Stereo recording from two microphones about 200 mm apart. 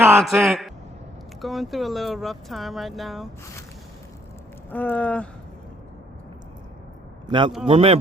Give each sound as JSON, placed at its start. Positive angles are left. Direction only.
{"t": 0.0, "sound": "a man's voice", "side_deg": -5}
{"t": 4.7, "sound": "speech", "side_deg": 10}
{"t": 7.3, "sound": "a man's voice", "side_deg": -25}